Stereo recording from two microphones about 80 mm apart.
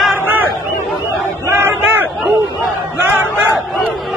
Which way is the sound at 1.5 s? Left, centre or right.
Right.